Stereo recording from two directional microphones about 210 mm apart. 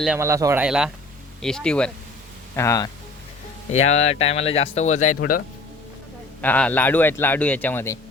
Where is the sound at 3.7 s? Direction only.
30° left (ahead or behind).